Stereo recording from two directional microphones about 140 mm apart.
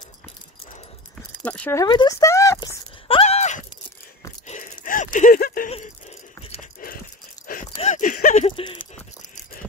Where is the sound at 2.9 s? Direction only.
40° left (ahead or behind); by 5.6 s 90° left.